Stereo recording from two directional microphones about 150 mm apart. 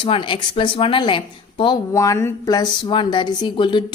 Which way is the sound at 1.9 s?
20° left (ahead or behind).